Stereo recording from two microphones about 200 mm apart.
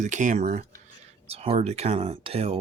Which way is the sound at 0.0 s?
40° right (ahead or behind).